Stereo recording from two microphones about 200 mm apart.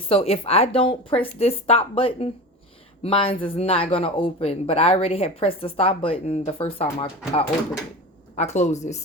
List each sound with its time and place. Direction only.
0.1 s a woman's voice: 30° left (ahead or behind)